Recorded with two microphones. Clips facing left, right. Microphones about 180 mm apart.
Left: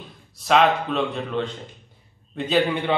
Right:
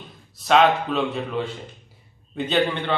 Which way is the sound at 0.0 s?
Centre (ahead or behind).